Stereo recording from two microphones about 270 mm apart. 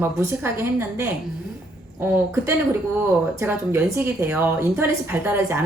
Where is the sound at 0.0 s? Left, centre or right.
Centre.